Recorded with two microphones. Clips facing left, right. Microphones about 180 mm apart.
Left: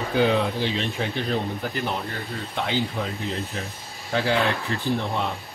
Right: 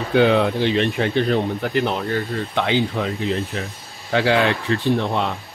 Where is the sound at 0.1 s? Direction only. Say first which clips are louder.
Right 6 dB; 65° right (ahead or behind).